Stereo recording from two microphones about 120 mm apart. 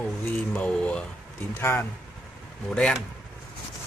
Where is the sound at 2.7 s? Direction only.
10° left (ahead or behind).